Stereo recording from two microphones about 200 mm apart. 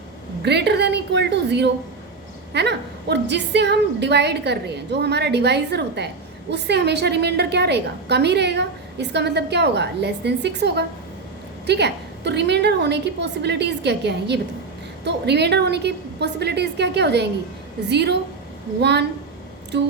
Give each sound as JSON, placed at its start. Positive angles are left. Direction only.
{"t": 0.4, "sound": "a woman's voice", "side_deg": -60}